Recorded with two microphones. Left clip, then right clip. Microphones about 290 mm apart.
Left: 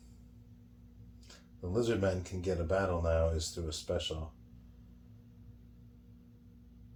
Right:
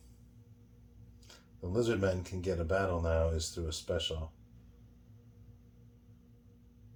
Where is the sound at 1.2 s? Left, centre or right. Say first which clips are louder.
Even; right.